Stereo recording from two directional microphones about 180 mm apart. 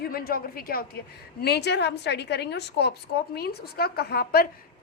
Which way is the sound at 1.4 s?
65° left (ahead or behind).